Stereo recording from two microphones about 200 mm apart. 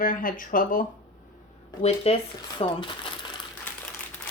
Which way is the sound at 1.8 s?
30° left (ahead or behind).